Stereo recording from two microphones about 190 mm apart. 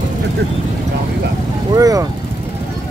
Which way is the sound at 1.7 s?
20° right (ahead or behind).